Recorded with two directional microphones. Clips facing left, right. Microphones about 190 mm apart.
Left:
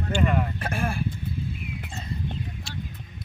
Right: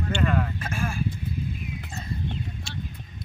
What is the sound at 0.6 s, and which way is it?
Speech, 60° left (ahead or behind).